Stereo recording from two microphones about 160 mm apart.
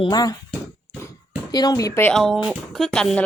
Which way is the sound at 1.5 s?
25° left (ahead or behind).